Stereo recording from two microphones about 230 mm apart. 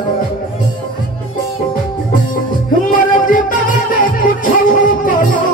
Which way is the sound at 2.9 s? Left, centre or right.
Left.